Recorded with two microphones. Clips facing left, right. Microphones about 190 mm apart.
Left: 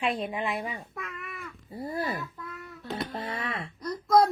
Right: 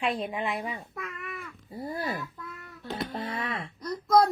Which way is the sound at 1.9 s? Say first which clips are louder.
Left 1 dB; centre (ahead or behind).